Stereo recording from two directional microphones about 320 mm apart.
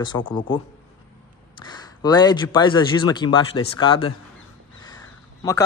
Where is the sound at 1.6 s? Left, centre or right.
Centre.